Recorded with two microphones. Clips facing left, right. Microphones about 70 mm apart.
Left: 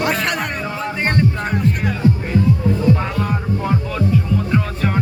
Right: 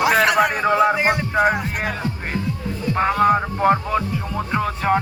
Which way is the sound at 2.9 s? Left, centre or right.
Right.